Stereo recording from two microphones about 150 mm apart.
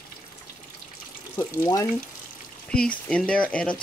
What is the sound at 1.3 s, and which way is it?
Speech, 20° left (ahead or behind).